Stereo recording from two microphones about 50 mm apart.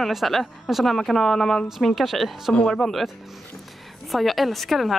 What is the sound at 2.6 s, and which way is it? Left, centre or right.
Speech, centre.